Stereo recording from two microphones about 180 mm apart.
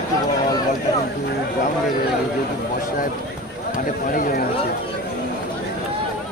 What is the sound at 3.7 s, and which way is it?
Speech, 50° left (ahead or behind).